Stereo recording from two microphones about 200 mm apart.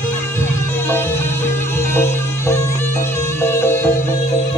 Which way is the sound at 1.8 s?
10° left (ahead or behind).